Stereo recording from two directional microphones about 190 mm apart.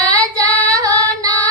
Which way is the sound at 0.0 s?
20° right (ahead or behind).